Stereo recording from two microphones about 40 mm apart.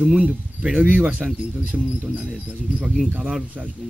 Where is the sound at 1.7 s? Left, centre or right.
Centre.